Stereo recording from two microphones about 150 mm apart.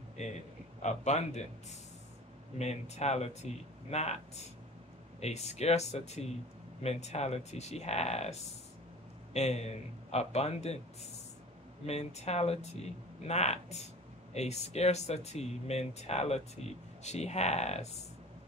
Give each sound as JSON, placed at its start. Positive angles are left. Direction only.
{"t": 0.2, "sound": "speech", "side_deg": 50}
{"t": 2.6, "sound": "speech", "side_deg": 45}
{"t": 5.2, "sound": "speech", "side_deg": 45}
{"t": 11.8, "sound": "speech", "side_deg": 45}